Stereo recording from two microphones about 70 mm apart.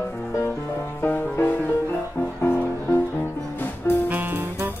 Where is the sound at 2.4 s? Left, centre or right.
Left.